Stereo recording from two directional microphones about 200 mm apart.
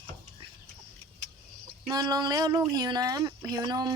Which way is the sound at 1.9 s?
20° right (ahead or behind).